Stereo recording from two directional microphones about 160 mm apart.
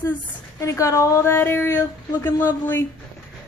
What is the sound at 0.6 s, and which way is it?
Speech, 20° left (ahead or behind).